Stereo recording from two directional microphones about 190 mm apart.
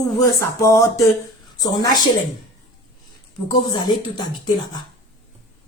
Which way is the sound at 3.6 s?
20° left (ahead or behind).